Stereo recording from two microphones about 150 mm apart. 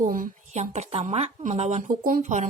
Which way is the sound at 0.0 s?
60° right (ahead or behind).